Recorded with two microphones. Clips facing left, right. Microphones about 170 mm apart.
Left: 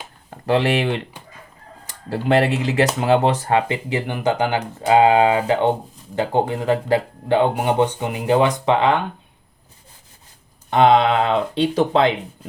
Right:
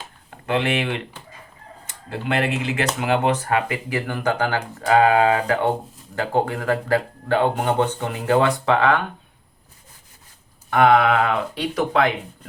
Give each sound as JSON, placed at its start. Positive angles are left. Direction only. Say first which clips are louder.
{"t": 0.3, "sound": "speech", "louder": "left 4 dB", "side_deg": 35}
{"t": 10.7, "sound": "speech", "louder": "left 1 dB", "side_deg": 25}